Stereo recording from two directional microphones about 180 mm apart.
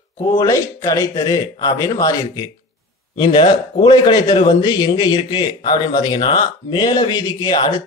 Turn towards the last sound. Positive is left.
turn(degrees=25)  # may be behind; listen again after turning